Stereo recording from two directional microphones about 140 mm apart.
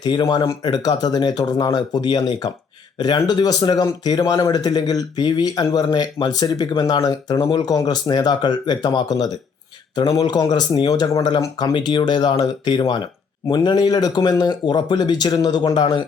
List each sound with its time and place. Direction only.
0.0 s speech: 30° left (ahead or behind)